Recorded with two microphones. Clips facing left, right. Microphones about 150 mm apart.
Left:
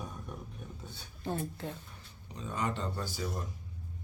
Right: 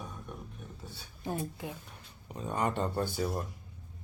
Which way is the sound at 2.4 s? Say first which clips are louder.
Right 4 dB; 55° right (ahead or behind).